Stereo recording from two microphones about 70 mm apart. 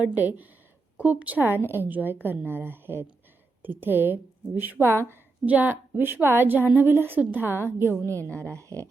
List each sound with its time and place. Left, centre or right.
0.0 s a woman's voice: right
5.5 s a woman's voice: right
8.0 s a woman's voice: left